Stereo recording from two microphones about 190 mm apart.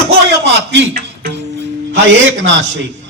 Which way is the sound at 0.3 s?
65° right (ahead or behind).